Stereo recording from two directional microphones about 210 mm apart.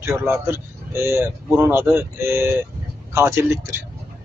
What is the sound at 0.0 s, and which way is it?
Speech, 10° right (ahead or behind).